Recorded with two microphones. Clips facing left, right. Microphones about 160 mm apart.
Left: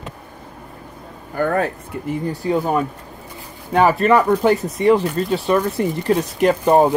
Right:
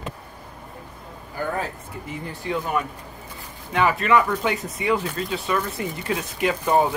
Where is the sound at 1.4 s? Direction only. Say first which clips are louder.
Left 8 dB; 60° left (ahead or behind).